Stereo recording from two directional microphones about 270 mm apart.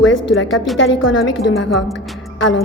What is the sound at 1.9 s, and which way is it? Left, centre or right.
Music, centre.